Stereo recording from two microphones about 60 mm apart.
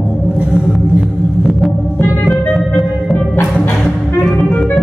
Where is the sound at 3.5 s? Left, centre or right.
Centre.